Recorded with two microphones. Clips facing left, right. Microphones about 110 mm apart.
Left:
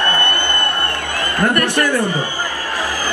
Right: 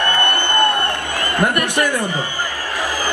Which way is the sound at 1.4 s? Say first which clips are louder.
Left 2 dB; 15° right (ahead or behind).